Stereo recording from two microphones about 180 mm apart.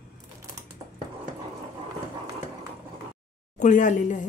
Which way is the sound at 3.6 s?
45° left (ahead or behind).